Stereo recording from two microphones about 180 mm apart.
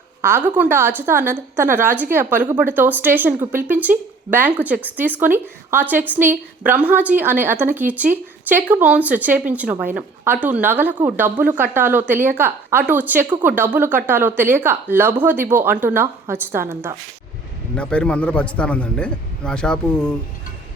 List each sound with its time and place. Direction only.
0.2 s a woman's voice: 10° right (ahead or behind)
17.7 s a man's voice: 5° left (ahead or behind)